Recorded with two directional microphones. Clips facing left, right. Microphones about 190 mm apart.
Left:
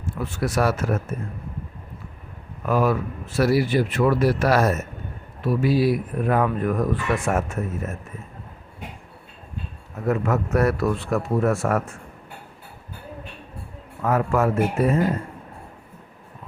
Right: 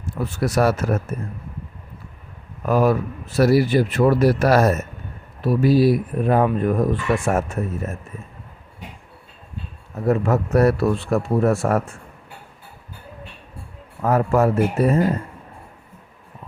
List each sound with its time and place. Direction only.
0.0 s speech: 40° right (ahead or behind)
2.6 s speech: 40° right (ahead or behind)
10.1 s speech: 35° right (ahead or behind)
14.0 s speech: 35° right (ahead or behind)